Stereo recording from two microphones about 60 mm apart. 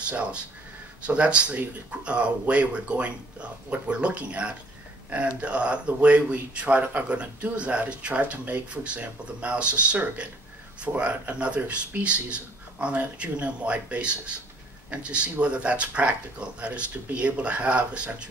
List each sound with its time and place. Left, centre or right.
0.0 s speech: centre